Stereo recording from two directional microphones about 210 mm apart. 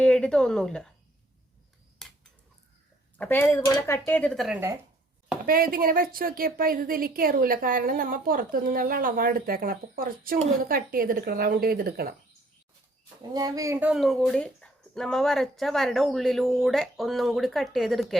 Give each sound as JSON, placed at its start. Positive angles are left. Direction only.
{"t": 0.0, "sound": "a woman's voice", "side_deg": 5}
{"t": 2.0, "sound": "a sound", "side_deg": 0}
{"t": 3.2, "sound": "speech", "side_deg": 10}
{"t": 5.5, "sound": "a woman's voice", "side_deg": -45}
{"t": 13.3, "sound": "speech", "side_deg": -15}